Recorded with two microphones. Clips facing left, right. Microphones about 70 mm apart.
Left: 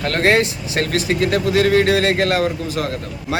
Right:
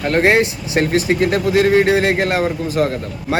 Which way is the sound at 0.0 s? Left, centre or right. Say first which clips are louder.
Right 2 dB; right.